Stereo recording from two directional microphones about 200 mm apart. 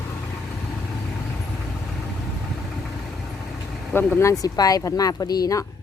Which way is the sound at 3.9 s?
10° left (ahead or behind).